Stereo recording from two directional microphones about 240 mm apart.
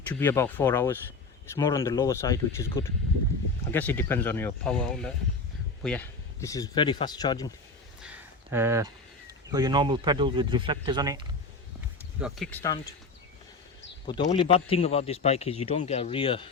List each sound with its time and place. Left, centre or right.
0.1 s speech: centre
8.0 s a sound: centre
9.5 s speech: centre
12.2 s speech: centre
14.3 s speech: left